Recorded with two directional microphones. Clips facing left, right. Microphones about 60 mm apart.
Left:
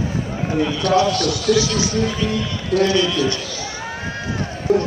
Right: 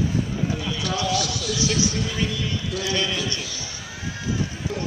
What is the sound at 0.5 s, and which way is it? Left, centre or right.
Speech, left.